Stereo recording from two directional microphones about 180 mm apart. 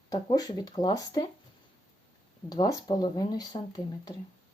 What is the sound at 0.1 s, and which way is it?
Speech, 20° left (ahead or behind).